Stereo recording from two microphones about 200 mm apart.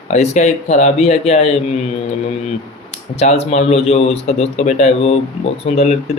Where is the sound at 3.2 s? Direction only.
30° left (ahead or behind).